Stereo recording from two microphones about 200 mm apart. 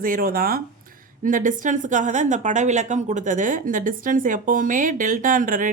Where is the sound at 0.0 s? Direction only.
45° right (ahead or behind).